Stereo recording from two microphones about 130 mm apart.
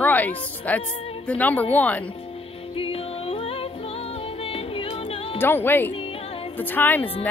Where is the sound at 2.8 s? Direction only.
50° left (ahead or behind).